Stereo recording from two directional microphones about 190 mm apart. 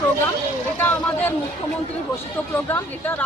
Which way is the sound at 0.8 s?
10° left (ahead or behind).